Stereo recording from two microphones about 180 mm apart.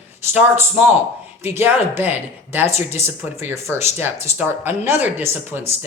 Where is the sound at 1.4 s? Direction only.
10° right (ahead or behind).